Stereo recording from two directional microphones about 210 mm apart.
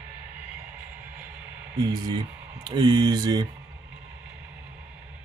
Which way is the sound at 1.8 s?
20° right (ahead or behind).